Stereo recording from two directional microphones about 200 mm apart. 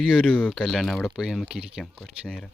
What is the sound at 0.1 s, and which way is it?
Speech, 5° left (ahead or behind).